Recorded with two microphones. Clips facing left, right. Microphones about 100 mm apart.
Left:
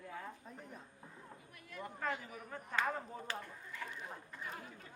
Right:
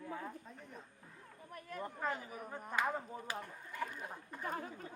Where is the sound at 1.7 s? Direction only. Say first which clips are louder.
Right 1 dB; 40° right (ahead or behind).